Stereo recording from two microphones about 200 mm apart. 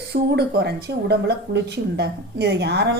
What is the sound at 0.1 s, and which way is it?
A woman's voice, 55° right (ahead or behind).